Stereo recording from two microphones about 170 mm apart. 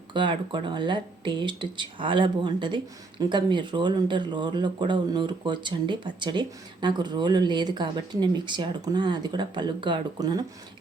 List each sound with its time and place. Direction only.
0.1 s speech: 30° right (ahead or behind)